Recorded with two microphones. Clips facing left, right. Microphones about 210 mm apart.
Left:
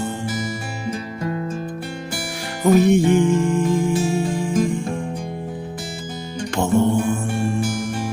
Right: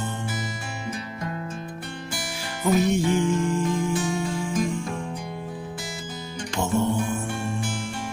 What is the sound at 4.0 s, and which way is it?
Music, 30° left (ahead or behind).